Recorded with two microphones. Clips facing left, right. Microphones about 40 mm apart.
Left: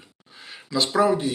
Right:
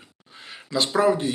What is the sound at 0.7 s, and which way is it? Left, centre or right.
Speech, right.